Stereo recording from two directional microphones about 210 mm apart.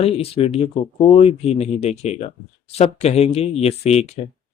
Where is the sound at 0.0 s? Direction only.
30° left (ahead or behind).